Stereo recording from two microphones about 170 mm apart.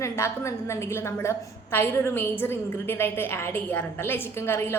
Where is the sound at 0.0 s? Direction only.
15° left (ahead or behind).